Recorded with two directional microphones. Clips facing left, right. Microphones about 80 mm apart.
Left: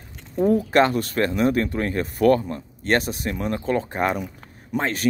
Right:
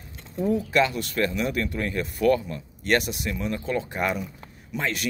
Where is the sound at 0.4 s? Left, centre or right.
Left.